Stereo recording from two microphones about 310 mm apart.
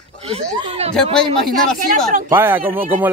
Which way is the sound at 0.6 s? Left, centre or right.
Centre.